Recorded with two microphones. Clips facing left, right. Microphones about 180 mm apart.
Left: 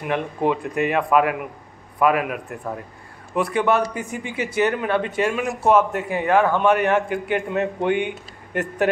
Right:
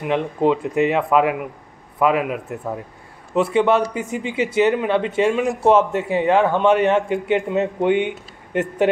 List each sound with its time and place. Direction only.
0.0 s a man's voice: 20° right (ahead or behind)